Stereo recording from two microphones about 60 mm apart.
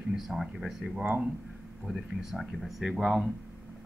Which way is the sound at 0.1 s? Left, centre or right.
Centre.